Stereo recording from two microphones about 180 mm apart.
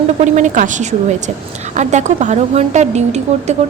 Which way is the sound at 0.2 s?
40° right (ahead or behind).